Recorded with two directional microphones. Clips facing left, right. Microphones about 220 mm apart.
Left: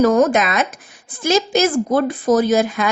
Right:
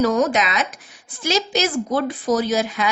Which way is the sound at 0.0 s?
50° left (ahead or behind).